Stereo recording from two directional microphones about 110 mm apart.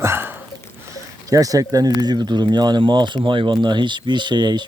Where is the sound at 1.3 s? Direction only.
30° right (ahead or behind).